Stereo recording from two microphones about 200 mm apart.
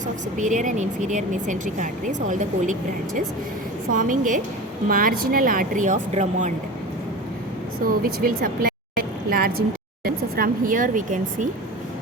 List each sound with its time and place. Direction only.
0.3 s speech: 40° right (ahead or behind)
3.9 s speech: 40° right (ahead or behind)
7.9 s speech: 45° right (ahead or behind)